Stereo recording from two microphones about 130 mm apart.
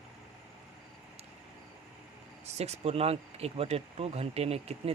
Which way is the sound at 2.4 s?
55° right (ahead or behind).